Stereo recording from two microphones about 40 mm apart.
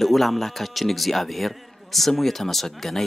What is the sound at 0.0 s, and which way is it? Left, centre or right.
A man's voice, centre.